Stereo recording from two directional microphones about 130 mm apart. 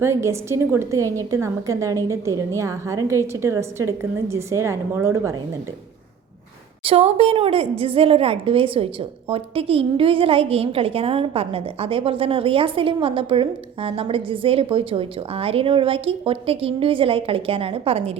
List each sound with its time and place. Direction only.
0.0 s a woman's voice: 20° right (ahead or behind)
6.8 s a woman's voice: 50° right (ahead or behind)